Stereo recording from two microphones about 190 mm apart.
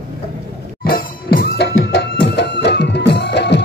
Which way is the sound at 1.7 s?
80° left.